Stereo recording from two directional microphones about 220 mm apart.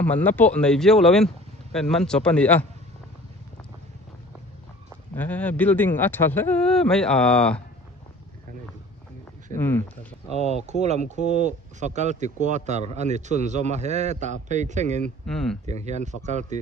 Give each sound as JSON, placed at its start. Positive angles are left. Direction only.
{"t": 0.0, "sound": "speech", "side_deg": 5}
{"t": 5.1, "sound": "speech", "side_deg": 5}
{"t": 9.6, "sound": "speech", "side_deg": 10}
{"t": 10.3, "sound": "speech", "side_deg": -30}
{"t": 15.3, "sound": "speech", "side_deg": 0}
{"t": 15.6, "sound": "speech", "side_deg": -30}